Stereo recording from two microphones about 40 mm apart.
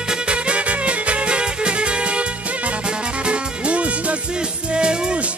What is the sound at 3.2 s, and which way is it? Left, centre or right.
Music, right.